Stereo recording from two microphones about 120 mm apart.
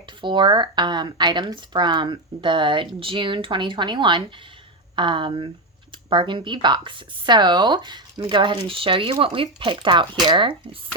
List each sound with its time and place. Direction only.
0.2 s speech: 40° right (ahead or behind)